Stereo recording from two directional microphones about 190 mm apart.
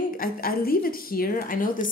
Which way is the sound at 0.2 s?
50° left (ahead or behind).